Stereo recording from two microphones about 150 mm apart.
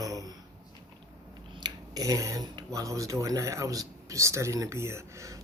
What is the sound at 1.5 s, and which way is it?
Cutlery, 25° right (ahead or behind).